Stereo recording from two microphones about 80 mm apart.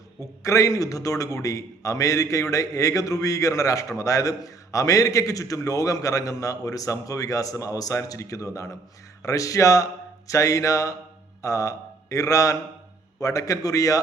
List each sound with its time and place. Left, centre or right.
0.4 s a man's voice: left